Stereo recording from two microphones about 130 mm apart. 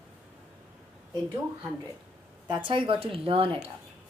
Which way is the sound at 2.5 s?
40° right (ahead or behind).